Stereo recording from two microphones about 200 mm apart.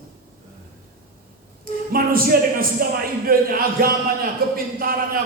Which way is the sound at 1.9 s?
45° right (ahead or behind).